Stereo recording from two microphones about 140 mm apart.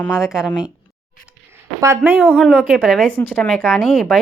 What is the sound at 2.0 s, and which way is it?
Speech, 10° right (ahead or behind).